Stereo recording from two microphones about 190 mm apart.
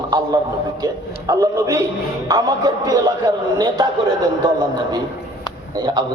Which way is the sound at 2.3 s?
20° right (ahead or behind).